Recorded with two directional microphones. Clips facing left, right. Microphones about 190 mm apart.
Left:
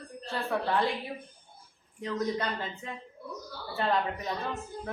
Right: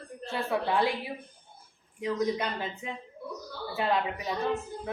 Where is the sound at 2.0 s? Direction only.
10° right (ahead or behind).